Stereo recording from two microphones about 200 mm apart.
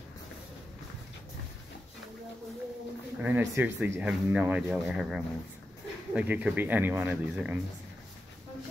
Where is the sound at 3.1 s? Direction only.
10° right (ahead or behind).